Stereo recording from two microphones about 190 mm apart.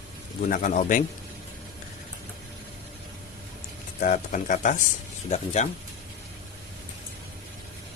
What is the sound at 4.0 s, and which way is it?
Speech, 40° left (ahead or behind).